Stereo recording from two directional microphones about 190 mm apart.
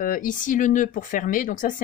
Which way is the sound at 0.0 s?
45° left (ahead or behind).